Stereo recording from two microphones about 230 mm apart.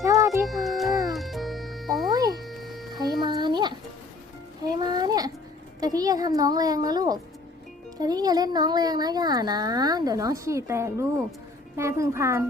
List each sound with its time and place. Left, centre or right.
0.0 s music: centre
0.4 s music: centre
0.9 s music: centre
1.1 s music: centre
2.0 s music: centre
2.5 s a sound: centre
2.9 s music: centre
5.8 s speech: centre